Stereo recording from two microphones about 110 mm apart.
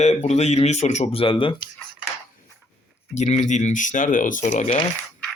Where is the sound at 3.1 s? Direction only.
90° left.